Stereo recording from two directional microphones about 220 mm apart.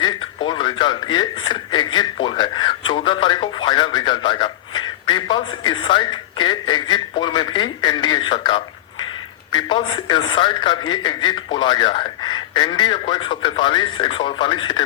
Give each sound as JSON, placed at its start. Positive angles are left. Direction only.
{"t": 0.4, "sound": "a man's voice", "side_deg": 20}